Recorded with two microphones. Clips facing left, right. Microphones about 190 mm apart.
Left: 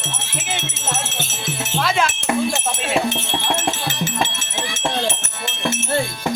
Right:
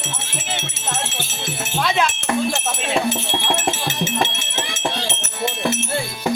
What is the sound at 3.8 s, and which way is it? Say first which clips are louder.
Music: right 1 dB; 20° right (ahead or behind).